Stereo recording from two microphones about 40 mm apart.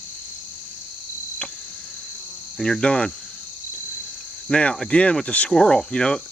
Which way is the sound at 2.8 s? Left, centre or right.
Left.